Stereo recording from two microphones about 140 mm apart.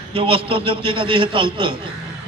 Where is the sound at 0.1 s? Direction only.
40° right (ahead or behind).